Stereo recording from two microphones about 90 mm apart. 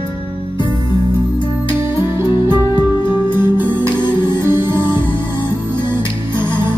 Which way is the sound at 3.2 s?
25° right (ahead or behind).